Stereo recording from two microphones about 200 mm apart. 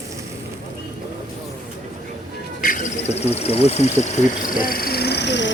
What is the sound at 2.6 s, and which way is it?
Speech, 45° left (ahead or behind).